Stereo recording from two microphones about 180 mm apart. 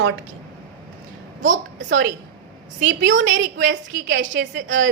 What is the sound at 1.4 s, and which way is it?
Speech, 45° right (ahead or behind).